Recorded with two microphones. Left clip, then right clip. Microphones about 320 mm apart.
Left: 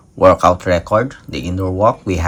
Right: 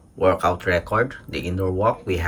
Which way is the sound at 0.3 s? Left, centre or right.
Centre.